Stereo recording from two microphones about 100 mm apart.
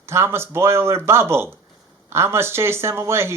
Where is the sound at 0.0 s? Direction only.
25° right (ahead or behind).